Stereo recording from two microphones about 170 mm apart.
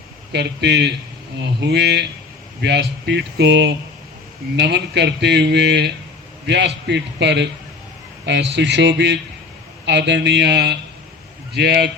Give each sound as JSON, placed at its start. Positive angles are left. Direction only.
{"t": 0.3, "sound": "a man's voice", "side_deg": -90}